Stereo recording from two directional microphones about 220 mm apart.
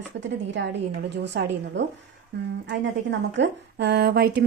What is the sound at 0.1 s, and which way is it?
Speech, 55° right (ahead or behind).